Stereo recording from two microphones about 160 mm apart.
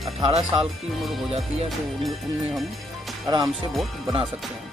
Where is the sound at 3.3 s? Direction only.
30° right (ahead or behind).